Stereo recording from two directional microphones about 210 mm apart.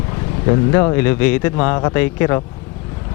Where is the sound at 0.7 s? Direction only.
15° left (ahead or behind).